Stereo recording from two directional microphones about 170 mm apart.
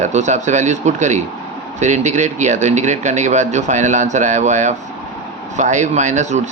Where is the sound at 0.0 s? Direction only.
45° right (ahead or behind).